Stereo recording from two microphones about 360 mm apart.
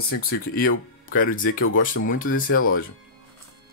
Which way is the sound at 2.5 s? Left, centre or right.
Left.